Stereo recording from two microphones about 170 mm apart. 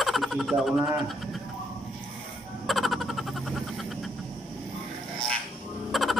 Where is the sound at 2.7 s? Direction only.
Centre (ahead or behind).